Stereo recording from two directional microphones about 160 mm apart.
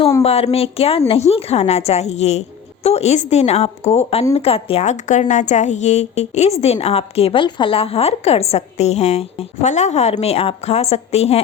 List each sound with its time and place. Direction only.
0.2 s a woman's voice: 40° left (ahead or behind)